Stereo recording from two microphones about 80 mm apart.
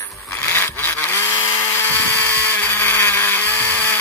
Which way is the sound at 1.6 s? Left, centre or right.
Left.